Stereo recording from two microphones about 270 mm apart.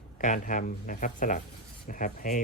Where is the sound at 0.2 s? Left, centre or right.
Left.